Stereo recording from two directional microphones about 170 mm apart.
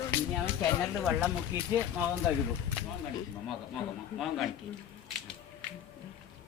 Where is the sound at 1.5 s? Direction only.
15° right (ahead or behind).